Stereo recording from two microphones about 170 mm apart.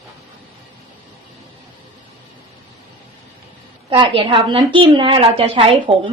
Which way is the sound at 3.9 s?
30° right (ahead or behind).